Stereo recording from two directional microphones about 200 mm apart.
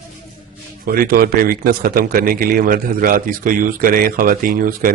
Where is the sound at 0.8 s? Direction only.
45° right (ahead or behind).